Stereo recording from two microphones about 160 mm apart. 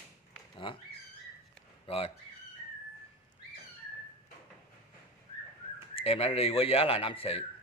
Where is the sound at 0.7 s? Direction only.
35° left (ahead or behind).